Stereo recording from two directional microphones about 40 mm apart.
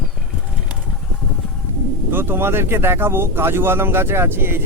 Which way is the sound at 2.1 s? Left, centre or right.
Right.